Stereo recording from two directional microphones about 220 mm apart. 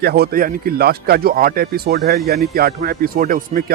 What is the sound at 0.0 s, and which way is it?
Speech, 45° right (ahead or behind).